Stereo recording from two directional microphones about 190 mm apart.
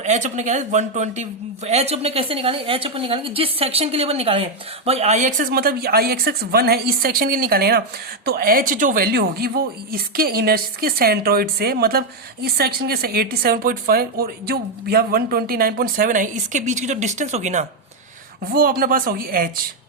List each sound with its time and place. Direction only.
0.0 s speech: 40° right (ahead or behind)
18.5 s speech: 50° right (ahead or behind)